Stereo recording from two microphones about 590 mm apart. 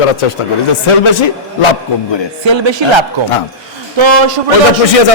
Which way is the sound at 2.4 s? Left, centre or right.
Right.